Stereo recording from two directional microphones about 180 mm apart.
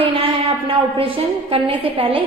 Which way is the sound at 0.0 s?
30° right (ahead or behind).